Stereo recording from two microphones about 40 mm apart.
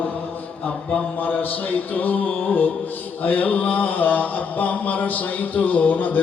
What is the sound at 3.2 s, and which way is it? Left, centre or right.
A man's voice, left.